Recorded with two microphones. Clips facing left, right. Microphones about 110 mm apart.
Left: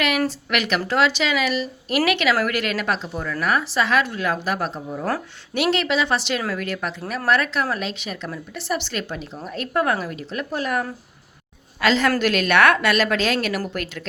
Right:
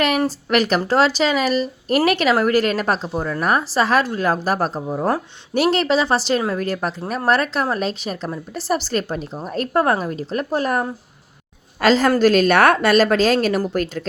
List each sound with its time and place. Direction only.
0.3 s a woman's voice: 40° right (ahead or behind)